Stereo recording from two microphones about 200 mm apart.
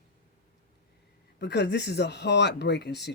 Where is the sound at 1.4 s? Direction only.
55° left (ahead or behind).